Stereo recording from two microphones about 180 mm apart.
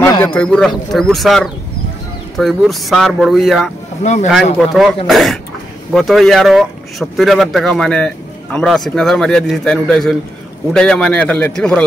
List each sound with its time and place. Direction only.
0.0 s speech: 15° left (ahead or behind)
4.0 s speech: 40° left (ahead or behind)
4.3 s speech: centre (ahead or behind)